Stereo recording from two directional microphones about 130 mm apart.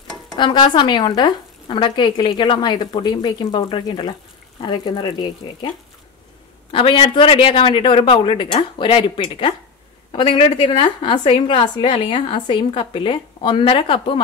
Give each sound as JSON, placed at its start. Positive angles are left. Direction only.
{"t": 0.4, "sound": "a woman's voice", "side_deg": 35}
{"t": 6.7, "sound": "a woman's voice", "side_deg": 45}